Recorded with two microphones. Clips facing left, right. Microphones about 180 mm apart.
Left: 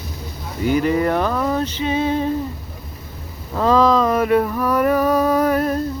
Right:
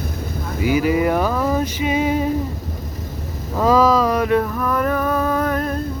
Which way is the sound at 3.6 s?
10° right (ahead or behind).